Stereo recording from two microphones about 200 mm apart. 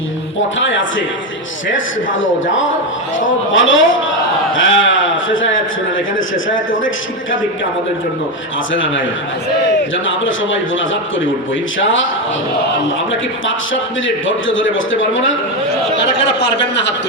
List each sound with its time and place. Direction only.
0.6 s a man's voice: 70° left (ahead or behind)
8.7 s a man's voice: 70° left (ahead or behind)
14.3 s a man's voice: 70° left (ahead or behind)
16.4 s speech: 60° left (ahead or behind)